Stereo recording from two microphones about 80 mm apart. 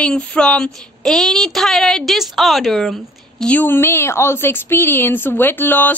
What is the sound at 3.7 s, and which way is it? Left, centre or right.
Speech, left.